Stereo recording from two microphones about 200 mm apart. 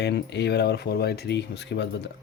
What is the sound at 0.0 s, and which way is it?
Speech, 60° left (ahead or behind).